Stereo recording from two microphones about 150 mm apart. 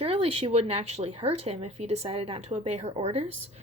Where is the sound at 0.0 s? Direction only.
45° right (ahead or behind).